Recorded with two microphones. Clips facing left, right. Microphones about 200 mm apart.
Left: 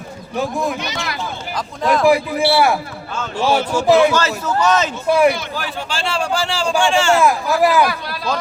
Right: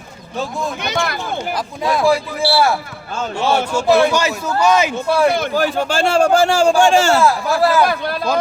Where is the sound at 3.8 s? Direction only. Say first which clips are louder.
Left 1 dB; 15° left (ahead or behind).